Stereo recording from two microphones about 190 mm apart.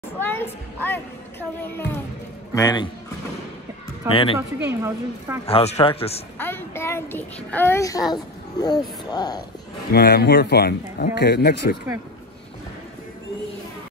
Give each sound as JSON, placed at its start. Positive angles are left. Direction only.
{"t": 0.2, "sound": "a child's voice", "side_deg": 10}
{"t": 2.5, "sound": "a man's voice", "side_deg": 20}
{"t": 4.1, "sound": "a man's voice", "side_deg": 30}
{"t": 4.4, "sound": "a woman's voice", "side_deg": -15}
{"t": 5.5, "sound": "speech", "side_deg": 35}
{"t": 6.3, "sound": "a child's voice", "side_deg": 10}
{"t": 9.9, "sound": "speech", "side_deg": 60}